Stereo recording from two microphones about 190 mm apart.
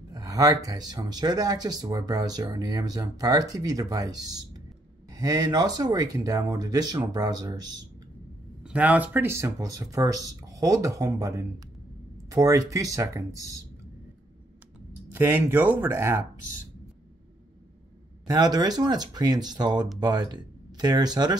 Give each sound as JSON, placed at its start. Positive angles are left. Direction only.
{"t": 0.1, "sound": "speech", "side_deg": -20}
{"t": 8.6, "sound": "speech", "side_deg": -10}
{"t": 15.1, "sound": "speech", "side_deg": -10}
{"t": 18.2, "sound": "speech", "side_deg": -20}